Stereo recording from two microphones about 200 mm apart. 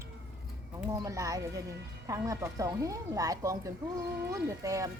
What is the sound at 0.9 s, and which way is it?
Speech, 15° right (ahead or behind).